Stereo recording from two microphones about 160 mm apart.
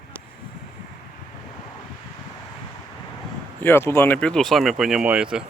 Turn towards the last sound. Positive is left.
turn(degrees=-5)  # may be behind; listen again after turning